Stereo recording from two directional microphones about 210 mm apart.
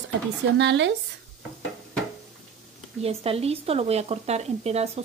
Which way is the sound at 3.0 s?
30° right (ahead or behind).